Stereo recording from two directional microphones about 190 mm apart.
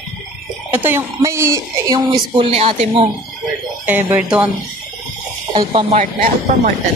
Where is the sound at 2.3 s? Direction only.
30° right (ahead or behind).